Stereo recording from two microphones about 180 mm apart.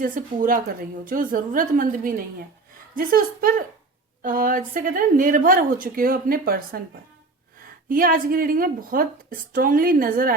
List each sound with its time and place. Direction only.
0.0 s a woman's voice: 50° right (ahead or behind)
7.9 s a woman's voice: 50° right (ahead or behind)